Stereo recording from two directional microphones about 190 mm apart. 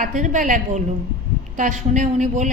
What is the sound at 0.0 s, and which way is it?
A woman's voice, 40° right (ahead or behind).